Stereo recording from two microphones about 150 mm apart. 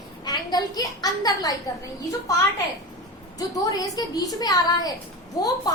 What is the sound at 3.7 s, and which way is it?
A woman's voice, 25° left (ahead or behind).